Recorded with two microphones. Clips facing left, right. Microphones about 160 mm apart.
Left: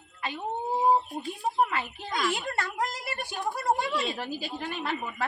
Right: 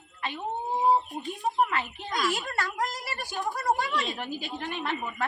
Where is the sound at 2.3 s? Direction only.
25° left (ahead or behind).